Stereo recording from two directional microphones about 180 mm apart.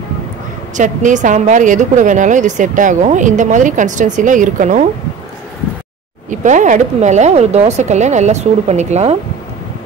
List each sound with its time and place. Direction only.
0.7 s a woman's voice: 45° right (ahead or behind)
6.4 s speech: 45° right (ahead or behind)